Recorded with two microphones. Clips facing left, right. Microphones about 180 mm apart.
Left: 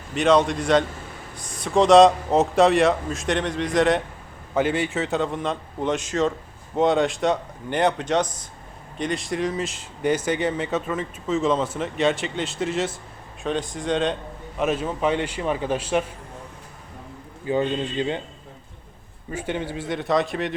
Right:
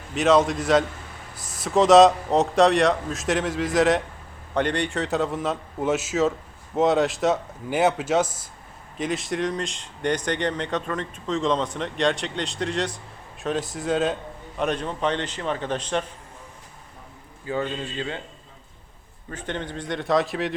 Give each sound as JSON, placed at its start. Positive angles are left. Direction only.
{"t": 0.1, "sound": "a man's voice", "side_deg": 0}
{"t": 17.4, "sound": "speech", "side_deg": 20}
{"t": 19.3, "sound": "speech", "side_deg": 10}